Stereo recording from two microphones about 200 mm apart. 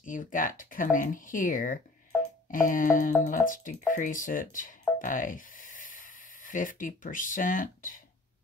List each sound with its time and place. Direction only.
0.0 s speech: 40° left (ahead or behind)
2.5 s music: 40° left (ahead or behind)
3.3 s speech: 40° left (ahead or behind)